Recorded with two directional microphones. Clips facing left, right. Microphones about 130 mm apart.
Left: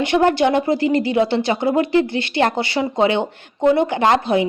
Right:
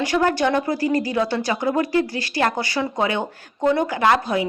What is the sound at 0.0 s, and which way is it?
A woman's voice, 25° left (ahead or behind).